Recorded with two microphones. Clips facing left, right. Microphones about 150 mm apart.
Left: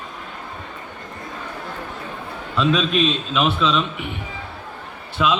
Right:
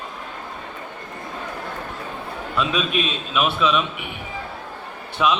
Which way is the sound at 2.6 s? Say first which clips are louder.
Left 4 dB; 10° right (ahead or behind).